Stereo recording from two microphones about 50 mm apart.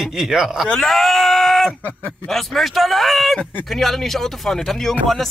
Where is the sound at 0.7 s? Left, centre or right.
Centre.